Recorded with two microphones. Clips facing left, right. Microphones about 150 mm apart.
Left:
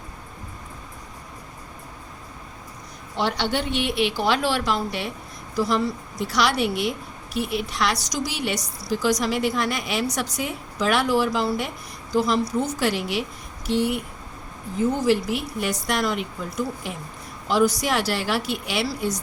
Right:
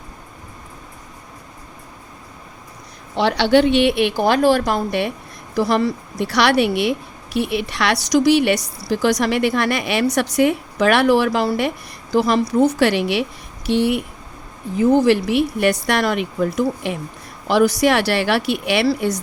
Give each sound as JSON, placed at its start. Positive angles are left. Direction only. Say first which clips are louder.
{"t": 3.2, "sound": "a woman's voice", "louder": "right 10 dB", "side_deg": -85}